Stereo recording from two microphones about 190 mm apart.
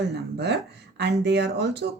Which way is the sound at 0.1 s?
65° right (ahead or behind).